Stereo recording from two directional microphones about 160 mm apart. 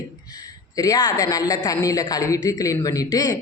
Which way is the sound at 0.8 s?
20° left (ahead or behind).